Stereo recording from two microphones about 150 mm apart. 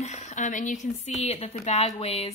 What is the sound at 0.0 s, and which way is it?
A woman's voice, 50° left (ahead or behind).